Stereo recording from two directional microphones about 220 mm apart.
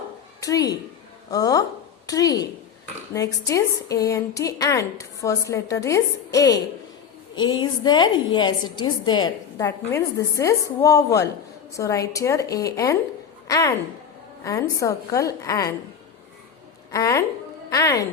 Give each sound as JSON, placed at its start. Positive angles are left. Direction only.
{"t": 0.3, "sound": "a woman's voice", "side_deg": 15}
{"t": 16.9, "sound": "a woman's voice", "side_deg": 15}